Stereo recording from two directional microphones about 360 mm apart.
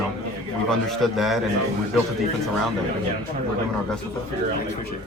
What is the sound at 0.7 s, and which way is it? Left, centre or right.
Speech, centre.